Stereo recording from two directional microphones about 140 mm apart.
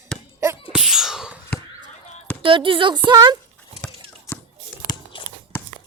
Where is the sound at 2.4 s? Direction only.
40° right (ahead or behind).